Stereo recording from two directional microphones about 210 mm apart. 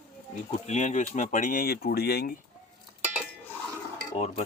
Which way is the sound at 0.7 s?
35° left (ahead or behind).